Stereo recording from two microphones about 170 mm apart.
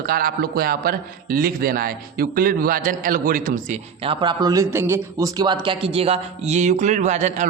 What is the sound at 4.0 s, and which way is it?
A man's voice, 30° right (ahead or behind).